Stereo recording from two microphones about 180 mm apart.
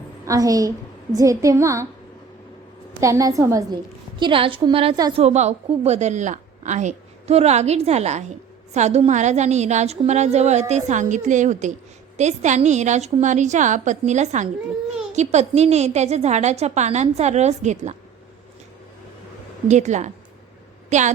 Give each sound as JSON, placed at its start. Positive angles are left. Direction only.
{"t": 0.3, "sound": "a woman's voice", "side_deg": -20}
{"t": 3.0, "sound": "a woman's voice", "side_deg": -20}
{"t": 4.2, "sound": "a woman's voice", "side_deg": -30}
{"t": 5.2, "sound": "a woman's voice", "side_deg": -40}
{"t": 19.6, "sound": "a woman's voice", "side_deg": -40}